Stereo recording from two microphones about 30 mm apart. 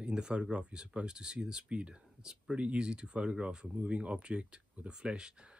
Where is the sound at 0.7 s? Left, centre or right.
Right.